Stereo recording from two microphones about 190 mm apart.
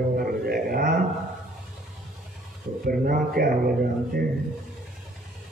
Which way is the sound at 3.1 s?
50° right (ahead or behind).